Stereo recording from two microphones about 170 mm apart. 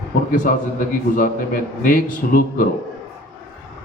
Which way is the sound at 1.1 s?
55° left (ahead or behind).